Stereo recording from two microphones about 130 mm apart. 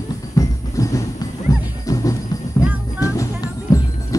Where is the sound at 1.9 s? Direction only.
25° left (ahead or behind).